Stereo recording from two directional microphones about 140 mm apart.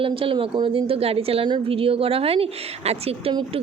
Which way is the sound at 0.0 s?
40° right (ahead or behind).